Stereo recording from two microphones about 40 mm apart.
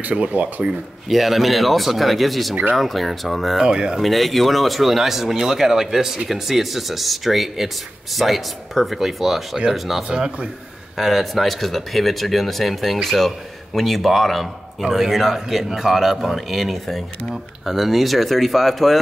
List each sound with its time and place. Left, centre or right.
0.2 s speech: right
1.0 s speech: centre
3.6 s speech: centre
4.0 s speech: centre
10.0 s speech: right
11.0 s speech: centre